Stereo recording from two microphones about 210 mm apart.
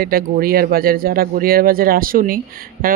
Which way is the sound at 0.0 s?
45° right (ahead or behind).